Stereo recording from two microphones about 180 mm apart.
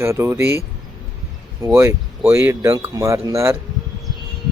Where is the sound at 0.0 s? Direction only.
15° right (ahead or behind).